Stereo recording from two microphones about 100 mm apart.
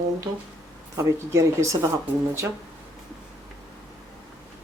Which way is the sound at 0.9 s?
30° right (ahead or behind).